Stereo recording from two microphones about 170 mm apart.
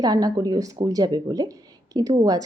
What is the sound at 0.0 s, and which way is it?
Speech, 20° right (ahead or behind).